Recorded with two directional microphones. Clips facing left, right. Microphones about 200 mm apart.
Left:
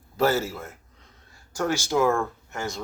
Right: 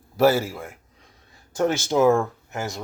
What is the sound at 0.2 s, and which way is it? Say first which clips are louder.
Speech: right 4 dB; 10° right (ahead or behind).